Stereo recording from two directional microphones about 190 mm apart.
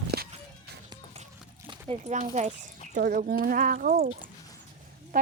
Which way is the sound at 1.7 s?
30° right (ahead or behind).